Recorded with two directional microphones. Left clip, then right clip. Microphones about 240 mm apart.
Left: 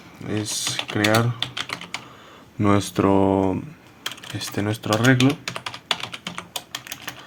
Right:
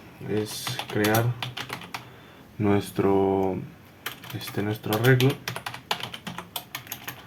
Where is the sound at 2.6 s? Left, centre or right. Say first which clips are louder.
Left 4 dB; left.